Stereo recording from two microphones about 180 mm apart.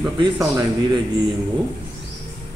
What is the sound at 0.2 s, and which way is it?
Speech, 20° right (ahead or behind).